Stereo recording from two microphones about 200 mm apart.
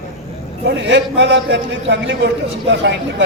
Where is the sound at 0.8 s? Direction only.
65° right (ahead or behind).